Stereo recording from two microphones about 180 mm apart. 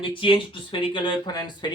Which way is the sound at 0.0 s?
30° left (ahead or behind).